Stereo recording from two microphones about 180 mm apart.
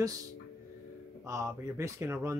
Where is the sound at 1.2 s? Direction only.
15° right (ahead or behind).